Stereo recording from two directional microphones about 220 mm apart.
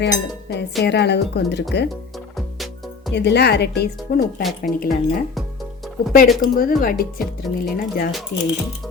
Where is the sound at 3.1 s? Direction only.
50° left (ahead or behind).